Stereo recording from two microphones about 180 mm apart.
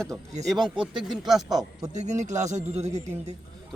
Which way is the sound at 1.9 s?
40° right (ahead or behind).